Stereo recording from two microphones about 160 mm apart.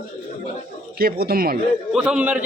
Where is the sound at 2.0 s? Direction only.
5° right (ahead or behind).